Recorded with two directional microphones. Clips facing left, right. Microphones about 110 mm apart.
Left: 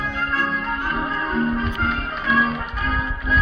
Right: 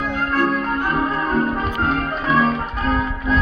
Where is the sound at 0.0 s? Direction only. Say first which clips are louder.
Right 5 dB; 50° right (ahead or behind).